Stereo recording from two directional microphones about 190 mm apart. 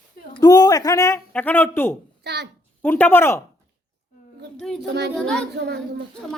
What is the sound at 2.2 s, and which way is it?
Speech, 60° right (ahead or behind).